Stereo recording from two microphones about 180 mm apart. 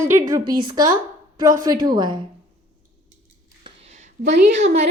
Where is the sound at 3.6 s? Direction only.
40° right (ahead or behind).